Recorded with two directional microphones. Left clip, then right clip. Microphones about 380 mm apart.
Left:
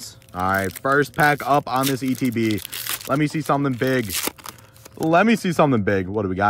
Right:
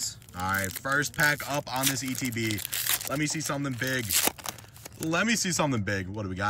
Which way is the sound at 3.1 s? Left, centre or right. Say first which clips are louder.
Left 10 dB; centre.